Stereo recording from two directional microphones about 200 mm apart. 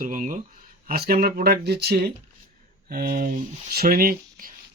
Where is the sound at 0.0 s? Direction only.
40° right (ahead or behind).